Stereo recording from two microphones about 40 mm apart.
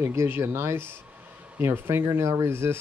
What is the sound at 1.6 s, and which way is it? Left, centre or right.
Speech, right.